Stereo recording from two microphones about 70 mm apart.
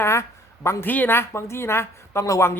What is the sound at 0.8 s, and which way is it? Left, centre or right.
Speech, left.